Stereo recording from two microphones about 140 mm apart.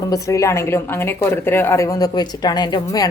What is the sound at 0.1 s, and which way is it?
Speech, 25° left (ahead or behind).